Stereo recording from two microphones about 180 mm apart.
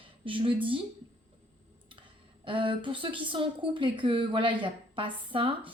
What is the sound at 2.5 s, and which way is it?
A woman's voice, 30° right (ahead or behind).